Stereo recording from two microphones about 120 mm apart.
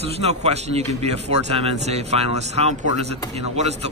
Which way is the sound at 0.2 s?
60° right (ahead or behind).